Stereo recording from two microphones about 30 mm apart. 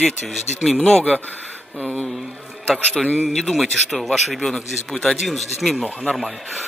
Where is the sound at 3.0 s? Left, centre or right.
Centre.